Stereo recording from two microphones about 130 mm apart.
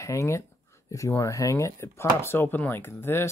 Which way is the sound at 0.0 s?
25° left (ahead or behind).